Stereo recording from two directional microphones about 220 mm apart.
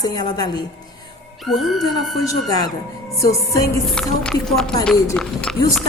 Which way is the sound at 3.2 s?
15° left (ahead or behind).